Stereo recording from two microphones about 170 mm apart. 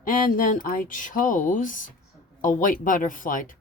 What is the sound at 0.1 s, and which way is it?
Speech, 55° left (ahead or behind).